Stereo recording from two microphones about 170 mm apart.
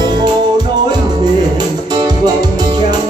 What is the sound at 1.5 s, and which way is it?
Music, 25° right (ahead or behind).